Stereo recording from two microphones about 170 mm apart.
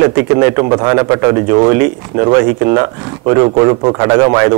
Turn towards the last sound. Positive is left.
turn(degrees=-20)  # may be behind; listen again after turning